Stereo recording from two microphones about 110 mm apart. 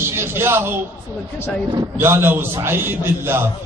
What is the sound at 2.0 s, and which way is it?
A man's voice, 20° right (ahead or behind).